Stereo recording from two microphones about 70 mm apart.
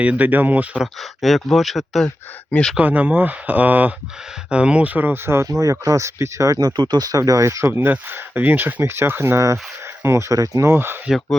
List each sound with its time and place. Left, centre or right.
0.0 s speech: right
1.2 s speech: centre
2.5 s speech: centre
2.7 s speech: right
5.5 s speech: right
7.2 s speech: right
7.7 s speech: right
10.7 s speech: right